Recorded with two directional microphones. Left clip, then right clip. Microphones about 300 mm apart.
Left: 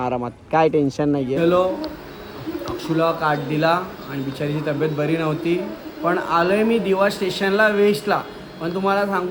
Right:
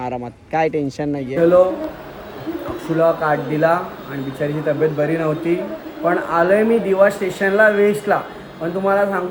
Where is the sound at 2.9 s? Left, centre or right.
Centre.